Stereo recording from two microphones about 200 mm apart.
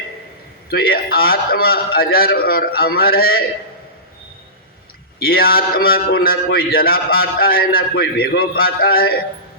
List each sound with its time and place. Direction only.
0.7 s a man's voice: 50° left (ahead or behind)
5.2 s a man's voice: 50° left (ahead or behind)